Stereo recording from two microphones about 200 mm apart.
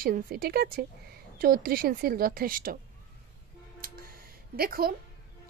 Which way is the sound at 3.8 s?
45° right (ahead or behind).